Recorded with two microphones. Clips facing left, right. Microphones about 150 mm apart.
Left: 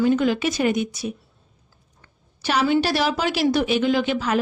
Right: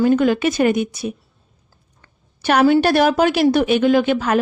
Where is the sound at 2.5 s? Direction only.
55° right (ahead or behind).